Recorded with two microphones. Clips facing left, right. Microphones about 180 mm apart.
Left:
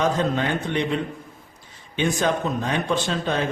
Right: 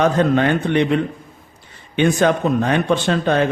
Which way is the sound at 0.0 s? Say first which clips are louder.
Right 6 dB; 65° right (ahead or behind).